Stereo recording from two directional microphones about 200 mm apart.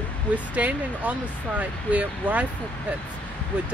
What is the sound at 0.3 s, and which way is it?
Speech, 5° right (ahead or behind).